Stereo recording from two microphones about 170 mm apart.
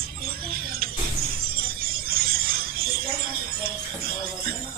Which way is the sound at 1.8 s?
60° right (ahead or behind).